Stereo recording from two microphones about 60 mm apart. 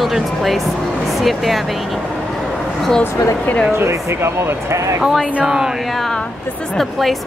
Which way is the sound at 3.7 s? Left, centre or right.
Right.